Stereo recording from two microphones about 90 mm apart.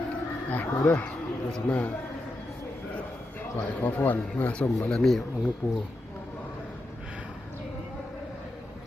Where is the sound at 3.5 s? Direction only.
20° left (ahead or behind).